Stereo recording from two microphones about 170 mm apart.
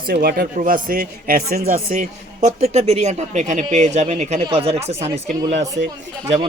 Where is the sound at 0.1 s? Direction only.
60° right (ahead or behind).